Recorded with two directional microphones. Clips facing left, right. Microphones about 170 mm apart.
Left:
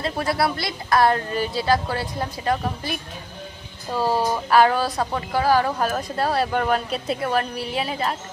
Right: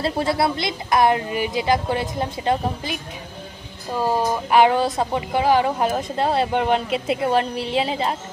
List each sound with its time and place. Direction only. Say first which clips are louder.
0.0 s speech: right 2 dB; 25° right (ahead or behind)